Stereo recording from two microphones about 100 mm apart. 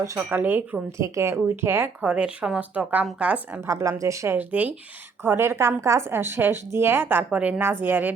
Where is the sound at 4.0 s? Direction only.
30° right (ahead or behind).